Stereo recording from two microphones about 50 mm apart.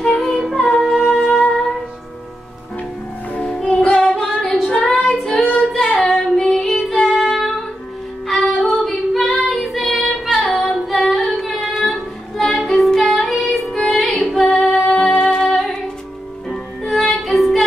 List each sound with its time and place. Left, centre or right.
0.1 s singing: centre
0.6 s music: centre
0.8 s music: centre
3.3 s music: centre
4.1 s female singing: centre
5.7 s singing: centre
7.1 s music: centre
8.3 s music: centre
8.8 s female singing: centre
10.9 s child singing: centre
15.5 s music: centre